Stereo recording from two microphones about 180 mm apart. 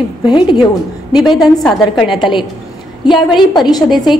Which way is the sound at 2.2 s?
25° left (ahead or behind).